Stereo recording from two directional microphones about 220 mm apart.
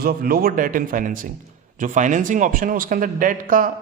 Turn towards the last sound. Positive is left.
turn(degrees=-40)  # may be behind; listen again after turning